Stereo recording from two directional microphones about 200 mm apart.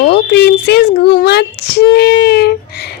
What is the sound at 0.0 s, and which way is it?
A child's voice, 55° left (ahead or behind).